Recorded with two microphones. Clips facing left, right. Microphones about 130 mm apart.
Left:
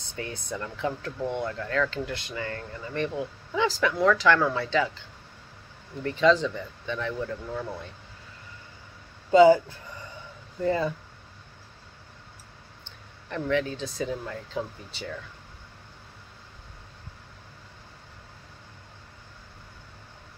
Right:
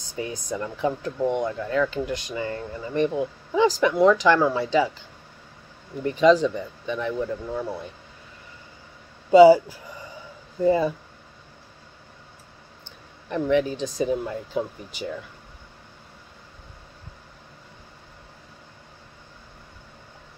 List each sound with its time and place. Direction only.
0.1 s speech: 15° right (ahead or behind)
6.0 s speech: 15° right (ahead or behind)
9.3 s speech: 10° right (ahead or behind)
13.3 s speech: 15° right (ahead or behind)